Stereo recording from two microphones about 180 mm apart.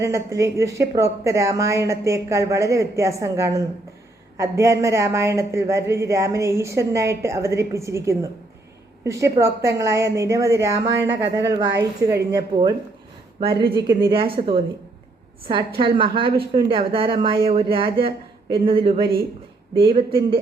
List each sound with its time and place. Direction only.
0.0 s speech: 15° right (ahead or behind)
11.1 s speech: 75° right (ahead or behind)
11.4 s speech: 20° right (ahead or behind)
16.1 s speech: 30° right (ahead or behind)